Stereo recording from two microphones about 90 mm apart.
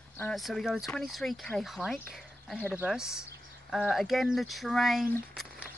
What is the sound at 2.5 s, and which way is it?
Speech, 20° left (ahead or behind).